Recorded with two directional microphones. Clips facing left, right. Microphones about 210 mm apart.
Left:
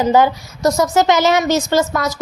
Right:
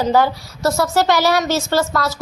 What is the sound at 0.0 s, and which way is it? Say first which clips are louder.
A woman's voice: left 2 dB; 20° left (ahead or behind).